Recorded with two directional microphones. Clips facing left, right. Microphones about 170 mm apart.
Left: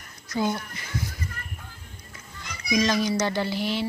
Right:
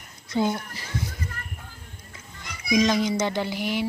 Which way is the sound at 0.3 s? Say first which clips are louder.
Right 2 dB; 20° right (ahead or behind).